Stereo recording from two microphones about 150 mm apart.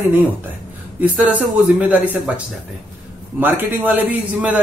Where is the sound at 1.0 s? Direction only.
10° right (ahead or behind).